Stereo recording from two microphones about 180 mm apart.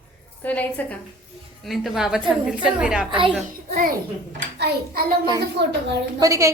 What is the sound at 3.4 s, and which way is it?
Speech, 45° right (ahead or behind).